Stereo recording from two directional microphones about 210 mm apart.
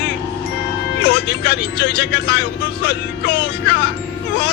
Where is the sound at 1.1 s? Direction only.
55° left (ahead or behind).